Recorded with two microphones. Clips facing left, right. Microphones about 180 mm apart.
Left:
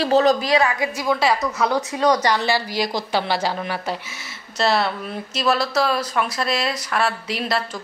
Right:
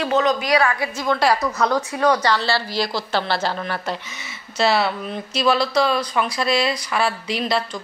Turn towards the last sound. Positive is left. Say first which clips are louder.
# right 2 dB
turn(degrees=5)  # may be behind; listen again after turning